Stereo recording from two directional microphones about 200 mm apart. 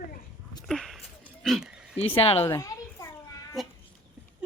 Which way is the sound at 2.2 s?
30° left (ahead or behind).